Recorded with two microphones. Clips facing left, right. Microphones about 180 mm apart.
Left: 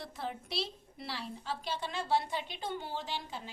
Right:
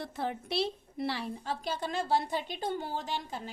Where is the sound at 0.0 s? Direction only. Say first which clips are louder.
Right 5 dB; 60° right (ahead or behind).